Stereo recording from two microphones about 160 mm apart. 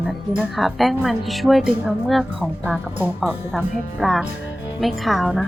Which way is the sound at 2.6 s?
10° right (ahead or behind).